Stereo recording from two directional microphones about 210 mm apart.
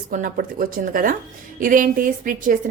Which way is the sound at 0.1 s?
40° right (ahead or behind).